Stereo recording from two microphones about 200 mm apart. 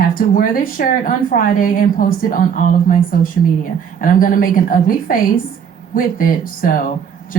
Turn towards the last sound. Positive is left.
turn(degrees=45)  # may be behind; listen again after turning